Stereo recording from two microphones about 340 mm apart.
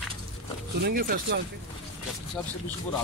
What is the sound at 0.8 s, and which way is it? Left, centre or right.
Speech, right.